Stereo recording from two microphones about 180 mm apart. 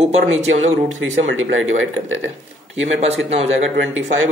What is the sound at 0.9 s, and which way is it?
Speech, 90° right.